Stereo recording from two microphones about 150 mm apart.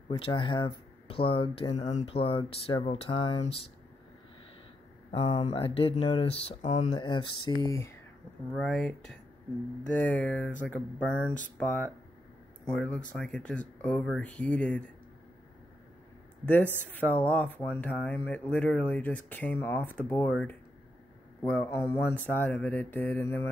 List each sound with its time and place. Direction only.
0.1 s speech: 35° left (ahead or behind)
5.1 s speech: 35° left (ahead or behind); by 6.9 s 55° left (ahead or behind)
6.9 s speech: 30° left (ahead or behind)
8.5 s speech: 5° left (ahead or behind)
17.0 s speech: 10° left (ahead or behind)